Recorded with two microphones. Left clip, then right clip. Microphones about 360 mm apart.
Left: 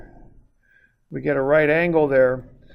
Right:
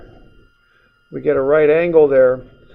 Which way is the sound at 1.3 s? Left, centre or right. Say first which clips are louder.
Right 5 dB; left.